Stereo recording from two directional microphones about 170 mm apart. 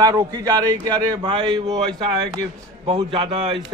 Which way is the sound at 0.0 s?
20° right (ahead or behind).